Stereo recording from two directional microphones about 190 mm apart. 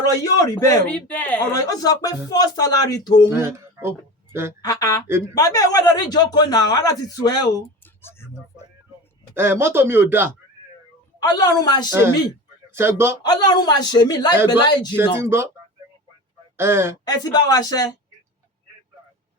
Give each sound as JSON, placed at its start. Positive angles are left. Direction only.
{"t": 0.0, "sound": "speech", "side_deg": 20}
{"t": 0.9, "sound": "speech", "side_deg": 5}
{"t": 1.5, "sound": "speech", "side_deg": 20}
{"t": 3.2, "sound": "speech", "side_deg": -15}
{"t": 4.6, "sound": "speech", "side_deg": 20}
{"t": 8.0, "sound": "a sound", "side_deg": 15}
{"t": 9.3, "sound": "speech", "side_deg": -15}
{"t": 11.2, "sound": "speech", "side_deg": 20}
{"t": 11.9, "sound": "speech", "side_deg": -15}
{"t": 13.2, "sound": "speech", "side_deg": 20}
{"t": 15.2, "sound": "speech", "side_deg": -15}
{"t": 16.6, "sound": "speech", "side_deg": -15}
{"t": 17.1, "sound": "speech", "side_deg": 20}